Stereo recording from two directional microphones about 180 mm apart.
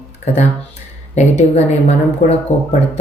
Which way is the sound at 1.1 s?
40° left (ahead or behind).